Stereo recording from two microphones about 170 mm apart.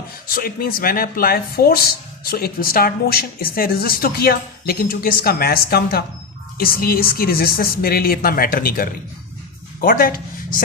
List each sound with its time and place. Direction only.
0.3 s speech: 60° left (ahead or behind)